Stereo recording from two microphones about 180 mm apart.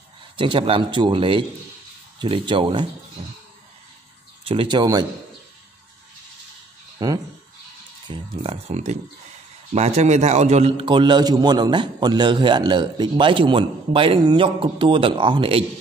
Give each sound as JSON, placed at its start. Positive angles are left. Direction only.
{"t": 0.4, "sound": "a man's voice", "side_deg": -30}
{"t": 4.5, "sound": "a man's voice", "side_deg": -30}
{"t": 7.0, "sound": "a man's voice", "side_deg": -20}